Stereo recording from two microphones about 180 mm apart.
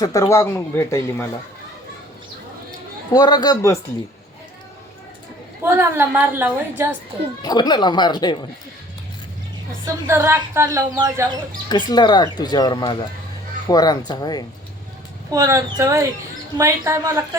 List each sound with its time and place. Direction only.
0.0 s speech: 20° left (ahead or behind)
3.1 s speech: 20° left (ahead or behind)
5.6 s speech: 10° right (ahead or behind)
7.4 s speech: 25° left (ahead or behind)
9.8 s speech: 15° right (ahead or behind)
11.7 s speech: 25° left (ahead or behind)
15.3 s speech: 15° right (ahead or behind)